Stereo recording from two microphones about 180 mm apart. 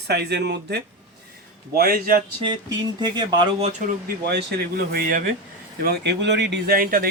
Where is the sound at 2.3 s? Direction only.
25° right (ahead or behind).